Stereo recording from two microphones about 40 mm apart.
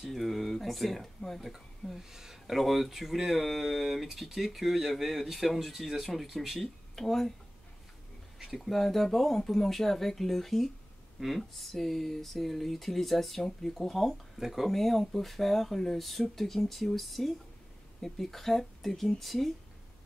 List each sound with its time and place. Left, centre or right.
0.1 s speech: centre
2.0 s speech: centre
7.0 s speech: centre
8.5 s speech: centre
14.4 s speech: centre
14.7 s speech: centre